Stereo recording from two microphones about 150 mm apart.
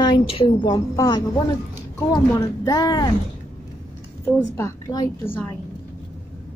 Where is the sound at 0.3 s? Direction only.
35° left (ahead or behind).